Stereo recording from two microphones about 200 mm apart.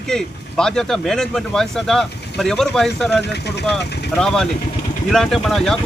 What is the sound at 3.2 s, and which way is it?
Speech, 55° left (ahead or behind).